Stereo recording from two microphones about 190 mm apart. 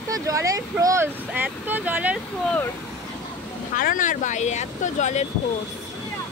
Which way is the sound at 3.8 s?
45° left (ahead or behind).